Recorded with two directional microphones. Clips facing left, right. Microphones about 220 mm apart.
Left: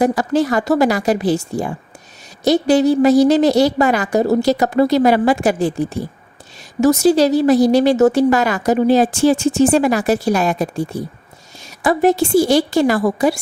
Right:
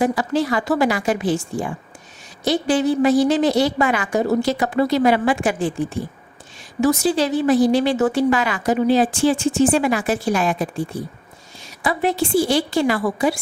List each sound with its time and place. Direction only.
0.0 s speech: 45° left (ahead or behind)